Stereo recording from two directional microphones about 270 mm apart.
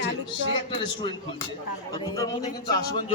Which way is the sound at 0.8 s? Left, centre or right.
Centre.